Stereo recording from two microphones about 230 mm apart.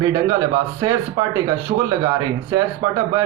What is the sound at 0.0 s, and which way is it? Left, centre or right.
Speech, centre.